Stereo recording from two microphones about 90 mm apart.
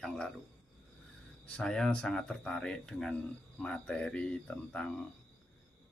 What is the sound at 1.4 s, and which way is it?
Speech, 10° left (ahead or behind).